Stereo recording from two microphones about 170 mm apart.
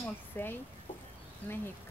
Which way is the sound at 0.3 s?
10° left (ahead or behind).